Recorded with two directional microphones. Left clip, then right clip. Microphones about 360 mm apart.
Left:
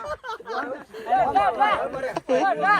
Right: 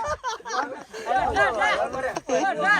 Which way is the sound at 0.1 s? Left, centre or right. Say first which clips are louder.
Right 2 dB; centre.